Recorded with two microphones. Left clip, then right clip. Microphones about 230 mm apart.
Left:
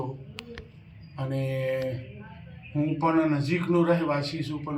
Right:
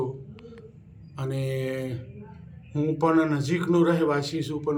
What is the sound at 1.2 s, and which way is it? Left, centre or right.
Speech, centre.